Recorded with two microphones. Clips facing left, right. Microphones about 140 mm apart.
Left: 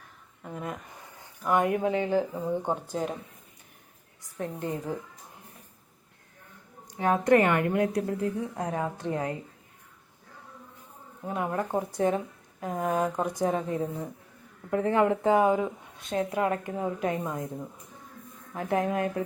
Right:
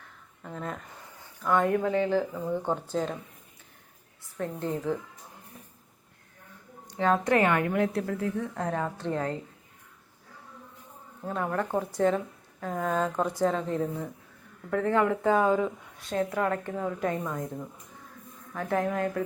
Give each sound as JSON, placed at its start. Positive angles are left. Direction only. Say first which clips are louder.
{"t": 0.4, "sound": "speech", "louder": "even", "side_deg": 15}
{"t": 4.4, "sound": "speech", "louder": "right 1 dB", "side_deg": 15}
{"t": 7.7, "sound": "speech", "louder": "left 1 dB", "side_deg": 25}
{"t": 11.3, "sound": "speech", "louder": "even", "side_deg": 15}
{"t": 18.5, "sound": "speech", "louder": "left 1 dB", "side_deg": 20}